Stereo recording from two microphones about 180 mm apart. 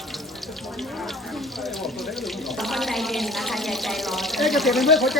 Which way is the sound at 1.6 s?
Centre (ahead or behind).